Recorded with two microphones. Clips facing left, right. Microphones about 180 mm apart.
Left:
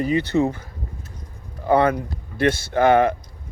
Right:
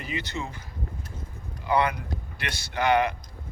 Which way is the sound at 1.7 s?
50° left (ahead or behind).